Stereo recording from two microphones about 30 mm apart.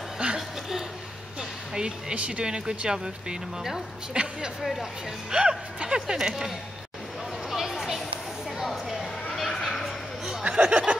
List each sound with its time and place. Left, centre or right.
0.2 s chuckle: right
1.8 s speech: right
2.1 s speech: right
2.4 s speech: right
4.6 s speech: centre
5.3 s speech: right
5.9 s speech: centre
7.4 s a sound: centre
9.6 s a sound: centre
10.5 s a sound: right